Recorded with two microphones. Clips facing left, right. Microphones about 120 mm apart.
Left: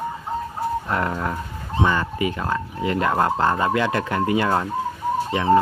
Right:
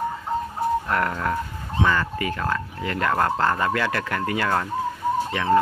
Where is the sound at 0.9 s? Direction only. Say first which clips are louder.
Even; 20° left (ahead or behind).